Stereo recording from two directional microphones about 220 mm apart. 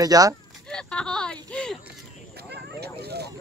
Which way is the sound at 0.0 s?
15° right (ahead or behind).